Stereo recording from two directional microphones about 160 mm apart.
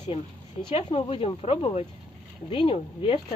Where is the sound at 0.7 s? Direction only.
40° left (ahead or behind).